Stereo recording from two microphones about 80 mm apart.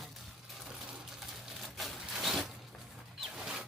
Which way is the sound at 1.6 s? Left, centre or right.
Centre.